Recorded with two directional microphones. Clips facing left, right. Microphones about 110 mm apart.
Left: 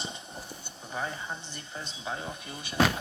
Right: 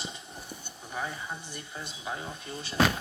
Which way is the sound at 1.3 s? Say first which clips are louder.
Even; 20° left (ahead or behind).